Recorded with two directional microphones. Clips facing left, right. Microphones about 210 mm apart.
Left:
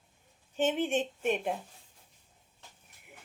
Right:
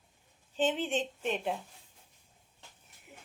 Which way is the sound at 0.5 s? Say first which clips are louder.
Left 2 dB; 15° left (ahead or behind).